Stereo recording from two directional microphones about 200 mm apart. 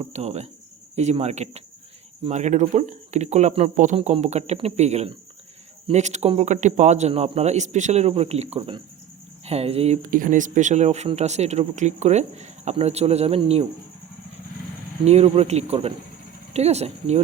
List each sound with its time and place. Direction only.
0.0 s cricket: 30° right (ahead or behind)
0.9 s speech: 35° right (ahead or behind)
15.0 s speech: 30° right (ahead or behind)